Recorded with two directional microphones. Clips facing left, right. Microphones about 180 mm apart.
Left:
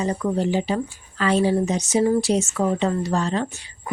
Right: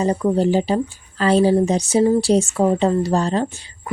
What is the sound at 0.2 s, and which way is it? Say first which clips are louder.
Speech: right 5 dB; 30° right (ahead or behind).